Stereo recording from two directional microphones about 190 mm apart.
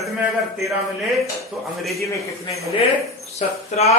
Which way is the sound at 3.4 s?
35° left (ahead or behind).